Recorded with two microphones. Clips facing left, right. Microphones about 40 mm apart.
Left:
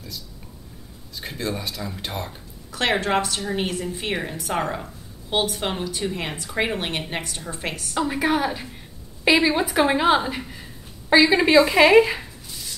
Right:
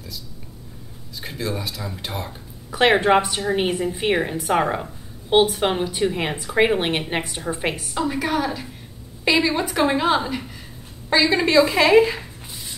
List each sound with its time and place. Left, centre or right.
1.2 s speech: centre
2.7 s a woman's voice: centre
7.9 s a woman's voice: centre